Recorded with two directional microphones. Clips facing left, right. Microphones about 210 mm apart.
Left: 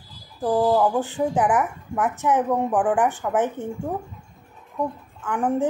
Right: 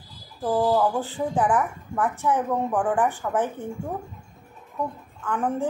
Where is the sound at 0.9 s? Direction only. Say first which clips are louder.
Left 3 dB; 20° left (ahead or behind).